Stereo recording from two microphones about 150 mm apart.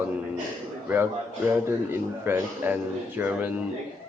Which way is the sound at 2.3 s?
15° right (ahead or behind).